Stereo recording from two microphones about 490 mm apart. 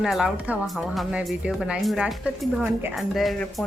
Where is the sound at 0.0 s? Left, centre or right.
Centre.